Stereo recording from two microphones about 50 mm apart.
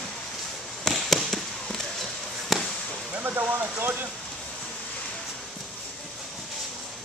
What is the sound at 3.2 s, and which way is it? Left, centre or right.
Speech, right.